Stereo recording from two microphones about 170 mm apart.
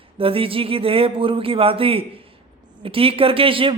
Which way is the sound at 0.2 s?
35° right (ahead or behind).